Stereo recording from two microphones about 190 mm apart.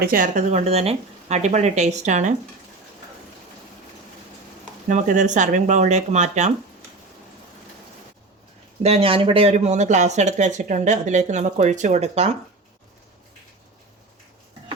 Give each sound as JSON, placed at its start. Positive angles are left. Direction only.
{"t": 0.0, "sound": "speech", "side_deg": -45}
{"t": 4.9, "sound": "speech", "side_deg": -40}
{"t": 8.8, "sound": "speech", "side_deg": -30}